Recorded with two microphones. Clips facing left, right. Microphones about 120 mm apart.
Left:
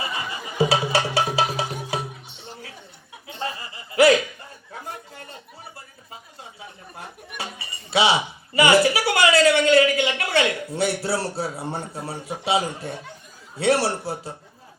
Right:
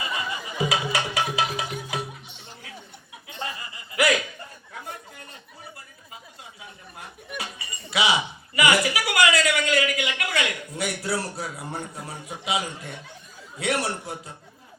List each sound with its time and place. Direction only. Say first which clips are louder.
0.0 s music: left 1 dB; 30° left (ahead or behind)
3.2 s chuckle: left 4 dB; 30° left (ahead or behind)
4.7 s chatter: left 4 dB; 30° left (ahead or behind)
6.4 s a sound: left 3 dB; 30° left (ahead or behind)
13.6 s a man's voice: left 6 dB; 30° left (ahead or behind)